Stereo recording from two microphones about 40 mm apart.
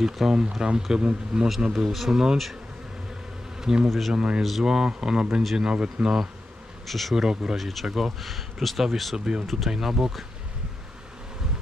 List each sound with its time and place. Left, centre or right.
0.0 s speech: centre
1.7 s speech: centre
3.6 s speech: centre
4.1 s speech: right
4.4 s speech: centre; by 6.1 s right
6.9 s speech: centre
7.2 s speech: centre
7.5 s speech: centre
9.1 s speech: centre